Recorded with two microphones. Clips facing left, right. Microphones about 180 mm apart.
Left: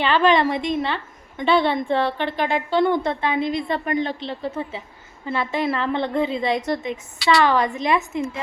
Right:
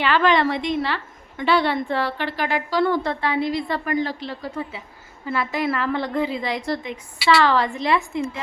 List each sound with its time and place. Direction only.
0.0 s a woman's voice: 25° left (ahead or behind)